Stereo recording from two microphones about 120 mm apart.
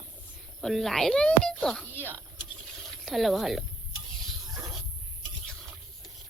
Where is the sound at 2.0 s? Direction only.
15° left (ahead or behind).